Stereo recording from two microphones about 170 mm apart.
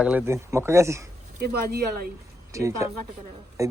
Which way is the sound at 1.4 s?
65° right (ahead or behind).